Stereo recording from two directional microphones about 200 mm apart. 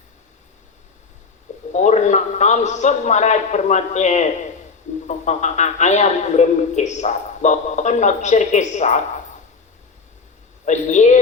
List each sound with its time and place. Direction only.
1.7 s a man's voice: 35° left (ahead or behind)
10.7 s a man's voice: 35° left (ahead or behind)